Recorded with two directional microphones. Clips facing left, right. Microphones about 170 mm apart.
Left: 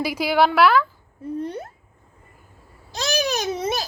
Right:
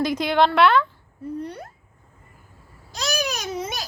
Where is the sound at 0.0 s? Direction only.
5° left (ahead or behind).